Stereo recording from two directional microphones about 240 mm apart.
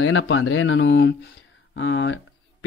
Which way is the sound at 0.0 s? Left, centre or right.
Left.